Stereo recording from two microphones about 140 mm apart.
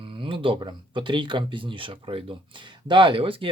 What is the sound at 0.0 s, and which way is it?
Speech, 40° right (ahead or behind).